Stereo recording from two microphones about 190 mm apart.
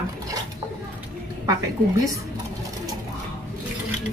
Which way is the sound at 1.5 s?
15° right (ahead or behind).